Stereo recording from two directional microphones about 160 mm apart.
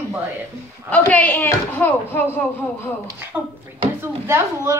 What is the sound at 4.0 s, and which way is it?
Speech, 15° right (ahead or behind).